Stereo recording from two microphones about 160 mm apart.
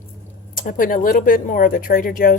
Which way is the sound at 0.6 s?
60° left (ahead or behind).